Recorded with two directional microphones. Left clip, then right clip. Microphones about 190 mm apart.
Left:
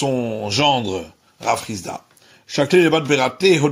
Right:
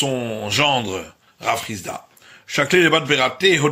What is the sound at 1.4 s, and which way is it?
Speech, 40° left (ahead or behind).